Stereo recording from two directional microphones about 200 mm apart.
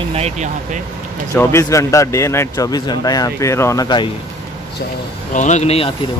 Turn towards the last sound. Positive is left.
turn(degrees=30)  # may be behind; listen again after turning